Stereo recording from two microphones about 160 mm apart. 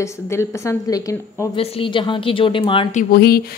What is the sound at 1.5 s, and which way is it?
A woman's voice, 35° left (ahead or behind).